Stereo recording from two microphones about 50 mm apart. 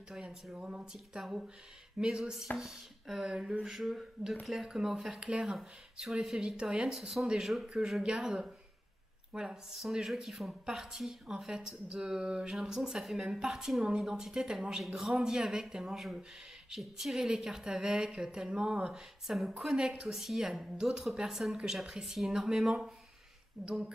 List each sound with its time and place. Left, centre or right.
0.1 s a woman's voice: centre
0.9 s a woman's voice: centre
19.2 s speech: centre
19.7 s a woman's voice: centre
20.7 s a woman's voice: centre